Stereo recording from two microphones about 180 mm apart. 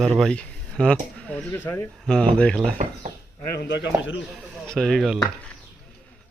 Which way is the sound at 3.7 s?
75° left (ahead or behind).